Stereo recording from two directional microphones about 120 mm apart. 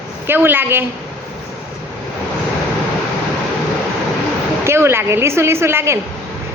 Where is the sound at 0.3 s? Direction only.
15° right (ahead or behind).